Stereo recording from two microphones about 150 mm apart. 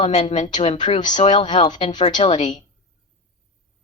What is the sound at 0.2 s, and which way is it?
A woman's voice, 40° left (ahead or behind).